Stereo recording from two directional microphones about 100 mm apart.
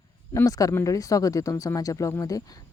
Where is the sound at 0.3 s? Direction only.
30° left (ahead or behind).